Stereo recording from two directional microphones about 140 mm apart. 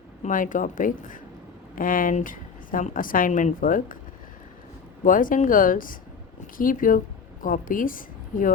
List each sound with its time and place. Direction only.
0.2 s a woman's voice: 70° left (ahead or behind)
1.7 s a woman's voice: 80° left
5.0 s a woman's voice: 75° left (ahead or behind)